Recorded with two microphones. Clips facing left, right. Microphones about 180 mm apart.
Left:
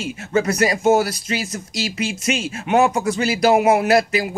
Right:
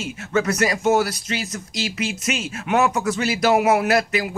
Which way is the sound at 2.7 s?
30° left (ahead or behind).